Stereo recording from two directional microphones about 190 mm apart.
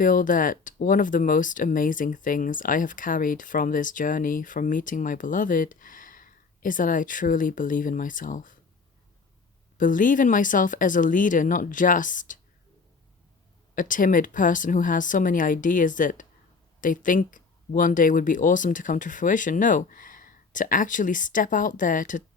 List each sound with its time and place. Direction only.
0.0 s speech: 45° left (ahead or behind)
9.7 s speech: 45° left (ahead or behind)
13.7 s speech: 45° left (ahead or behind)